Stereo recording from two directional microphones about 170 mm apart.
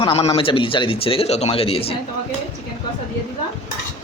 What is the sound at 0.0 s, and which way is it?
Speech, 30° left (ahead or behind).